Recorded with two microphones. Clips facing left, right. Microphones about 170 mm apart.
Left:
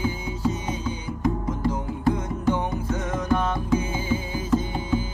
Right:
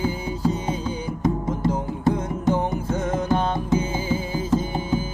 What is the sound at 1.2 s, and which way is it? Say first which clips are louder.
Music: right 2 dB; 25° right (ahead or behind).